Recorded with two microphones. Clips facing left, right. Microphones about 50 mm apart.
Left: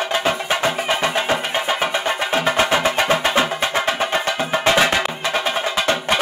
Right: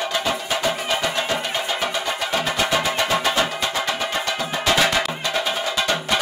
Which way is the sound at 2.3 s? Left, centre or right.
Left.